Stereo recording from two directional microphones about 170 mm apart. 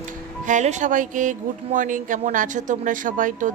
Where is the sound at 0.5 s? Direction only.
45° right (ahead or behind).